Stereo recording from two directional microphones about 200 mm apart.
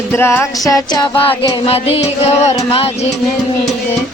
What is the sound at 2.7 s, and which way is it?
Speech, 30° left (ahead or behind).